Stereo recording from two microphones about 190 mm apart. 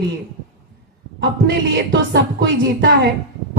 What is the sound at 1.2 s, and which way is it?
Music, 60° right (ahead or behind).